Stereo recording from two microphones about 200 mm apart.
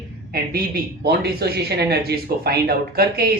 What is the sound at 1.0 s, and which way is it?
Speech, 50° right (ahead or behind).